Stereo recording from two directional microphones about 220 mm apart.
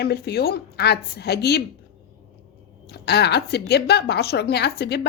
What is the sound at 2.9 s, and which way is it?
Speech, 50° left (ahead or behind).